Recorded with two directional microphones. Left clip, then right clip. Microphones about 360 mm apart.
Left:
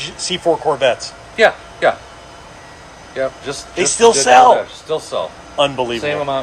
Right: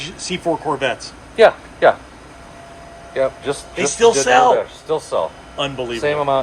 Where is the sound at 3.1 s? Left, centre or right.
Centre.